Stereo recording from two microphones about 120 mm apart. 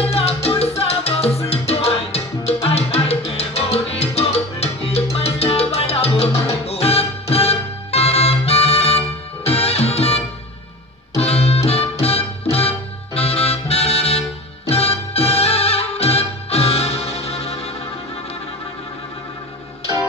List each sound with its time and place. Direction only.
0.0 s music: 55° left (ahead or behind)
3.3 s salsa music: 55° left (ahead or behind)
6.6 s music: 60° left (ahead or behind)